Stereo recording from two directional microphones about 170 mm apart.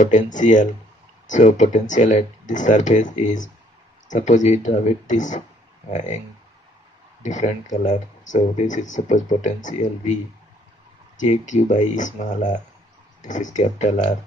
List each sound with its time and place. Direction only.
0.0 s speech: 45° left (ahead or behind)
7.2 s speech: 45° left (ahead or behind)
11.1 s speech: 45° left (ahead or behind)